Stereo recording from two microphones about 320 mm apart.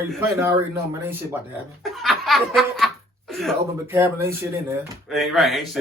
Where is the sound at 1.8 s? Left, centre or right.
Centre.